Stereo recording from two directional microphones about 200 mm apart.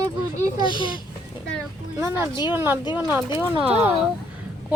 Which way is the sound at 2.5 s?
10° right (ahead or behind).